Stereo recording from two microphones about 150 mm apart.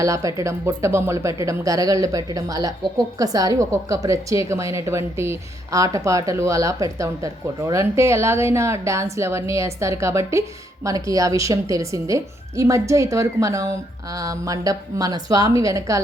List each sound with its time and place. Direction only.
0.0 s a woman's voice: 20° right (ahead or behind)